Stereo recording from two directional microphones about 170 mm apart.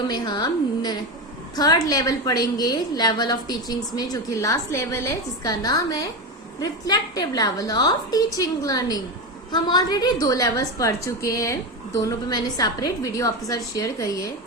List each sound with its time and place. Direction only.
0.1 s a woman's voice: 25° left (ahead or behind)